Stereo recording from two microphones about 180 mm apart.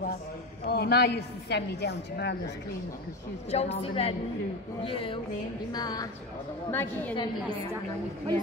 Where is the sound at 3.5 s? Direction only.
35° left (ahead or behind).